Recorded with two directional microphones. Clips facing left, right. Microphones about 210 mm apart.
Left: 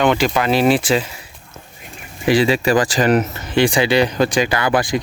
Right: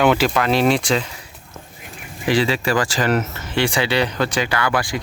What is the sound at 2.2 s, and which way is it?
Speech, 15° left (ahead or behind).